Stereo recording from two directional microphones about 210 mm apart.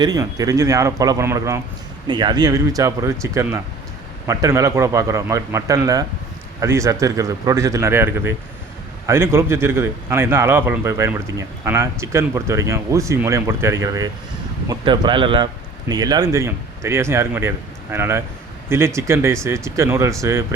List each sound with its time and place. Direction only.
0.0 s a man's voice: 15° right (ahead or behind)